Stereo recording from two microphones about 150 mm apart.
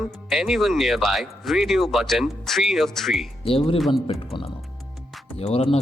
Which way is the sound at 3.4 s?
40° left (ahead or behind).